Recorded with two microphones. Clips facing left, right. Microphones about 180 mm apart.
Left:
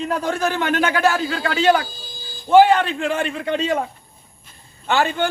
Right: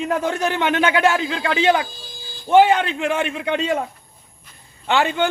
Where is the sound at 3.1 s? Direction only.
15° right (ahead or behind).